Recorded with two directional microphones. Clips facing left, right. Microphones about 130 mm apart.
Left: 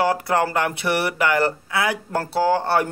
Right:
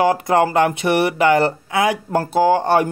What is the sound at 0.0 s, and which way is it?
Speech, 20° right (ahead or behind).